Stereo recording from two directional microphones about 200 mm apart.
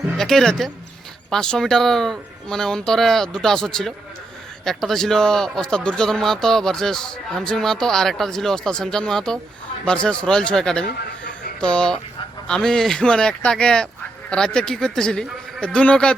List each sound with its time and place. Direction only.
0.2 s speech: centre (ahead or behind)
10.8 s a sound: 50° left (ahead or behind)
11.6 s speech: 5° left (ahead or behind)